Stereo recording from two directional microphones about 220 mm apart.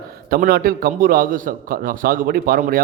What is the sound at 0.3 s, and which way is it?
A man's voice, 45° right (ahead or behind).